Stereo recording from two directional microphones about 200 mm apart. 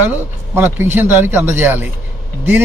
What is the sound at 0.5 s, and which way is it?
A man's voice, 10° right (ahead or behind).